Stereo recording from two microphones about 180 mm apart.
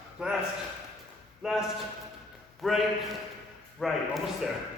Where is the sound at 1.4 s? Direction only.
Centre (ahead or behind).